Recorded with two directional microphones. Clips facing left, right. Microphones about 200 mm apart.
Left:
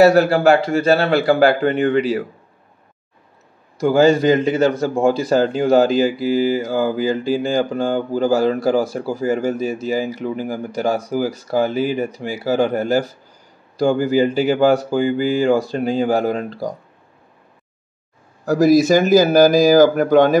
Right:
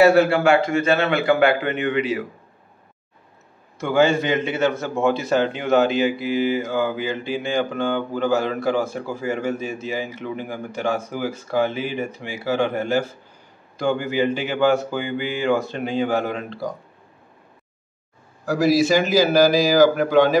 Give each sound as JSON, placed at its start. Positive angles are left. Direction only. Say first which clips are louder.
{"t": 0.0, "sound": "a man's voice", "louder": "left 3 dB", "side_deg": 40}
{"t": 3.8, "sound": "a man's voice", "louder": "left 5 dB", "side_deg": 35}
{"t": 18.4, "sound": "speech", "louder": "left 5 dB", "side_deg": 45}